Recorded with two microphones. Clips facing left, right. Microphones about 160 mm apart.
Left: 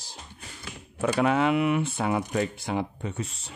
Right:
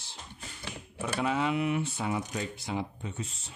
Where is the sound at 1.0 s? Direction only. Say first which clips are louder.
Left 7 dB; 65° left (ahead or behind).